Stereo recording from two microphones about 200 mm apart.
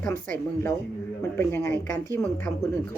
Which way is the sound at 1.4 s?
10° left (ahead or behind).